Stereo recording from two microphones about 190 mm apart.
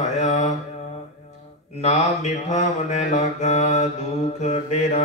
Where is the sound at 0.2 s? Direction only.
35° left (ahead or behind).